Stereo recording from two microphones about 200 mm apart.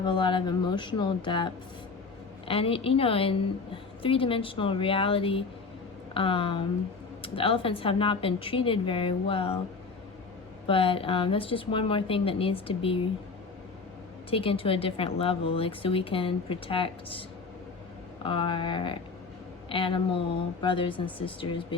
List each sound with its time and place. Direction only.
0.0 s speech: 25° left (ahead or behind)
10.7 s speech: 25° left (ahead or behind)
14.3 s speech: 25° left (ahead or behind)